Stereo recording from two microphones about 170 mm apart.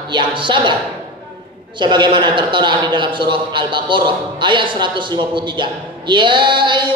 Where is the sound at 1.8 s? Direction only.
25° right (ahead or behind).